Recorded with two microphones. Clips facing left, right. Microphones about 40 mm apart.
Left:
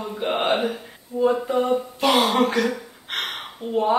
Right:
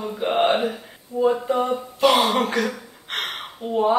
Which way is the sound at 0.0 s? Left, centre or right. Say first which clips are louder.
Right 1 dB; centre.